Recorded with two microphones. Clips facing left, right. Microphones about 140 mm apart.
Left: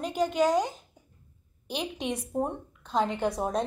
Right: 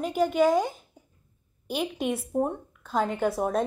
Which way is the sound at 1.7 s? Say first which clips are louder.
Right 4 dB; 5° right (ahead or behind).